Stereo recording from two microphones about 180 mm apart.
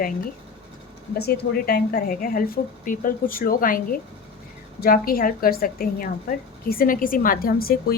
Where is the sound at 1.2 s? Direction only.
60° left (ahead or behind).